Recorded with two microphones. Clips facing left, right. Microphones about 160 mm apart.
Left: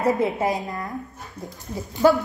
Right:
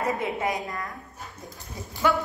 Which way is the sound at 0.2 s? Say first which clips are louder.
Left 5 dB; 35° left (ahead or behind).